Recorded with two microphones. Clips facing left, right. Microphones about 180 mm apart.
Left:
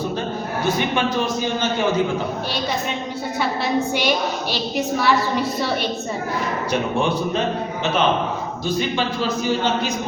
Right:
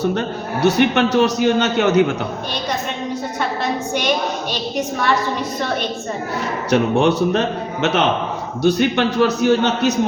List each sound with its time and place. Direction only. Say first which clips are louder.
0.0 s a man's voice: right 4 dB; 70° right (ahead or behind)
6.7 s a man's voice: right 7 dB; 70° right (ahead or behind)